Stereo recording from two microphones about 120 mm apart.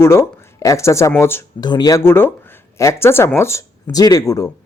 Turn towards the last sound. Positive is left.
turn(degrees=30)  # may be behind; listen again after turning